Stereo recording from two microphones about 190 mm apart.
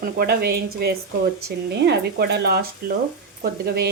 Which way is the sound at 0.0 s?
55° right (ahead or behind).